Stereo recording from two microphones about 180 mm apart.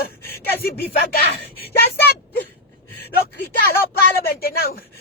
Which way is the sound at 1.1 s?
60° left (ahead or behind).